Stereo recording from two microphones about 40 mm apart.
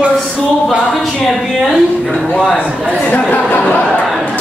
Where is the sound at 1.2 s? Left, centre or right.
Centre.